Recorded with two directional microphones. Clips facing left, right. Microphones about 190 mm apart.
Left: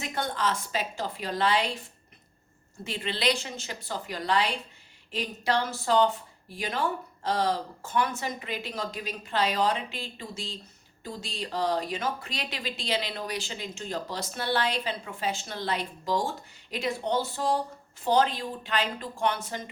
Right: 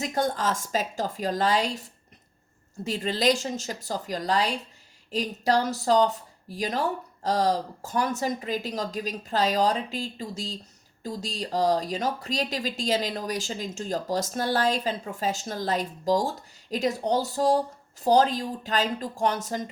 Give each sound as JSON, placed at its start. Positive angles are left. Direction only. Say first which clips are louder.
{"t": 0.0, "sound": "speech", "louder": "right 4 dB", "side_deg": -40}